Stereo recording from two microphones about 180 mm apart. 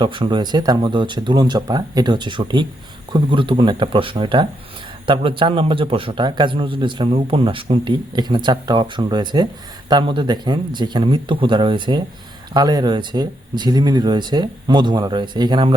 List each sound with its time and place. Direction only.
0.0 s a man's voice: 25° right (ahead or behind)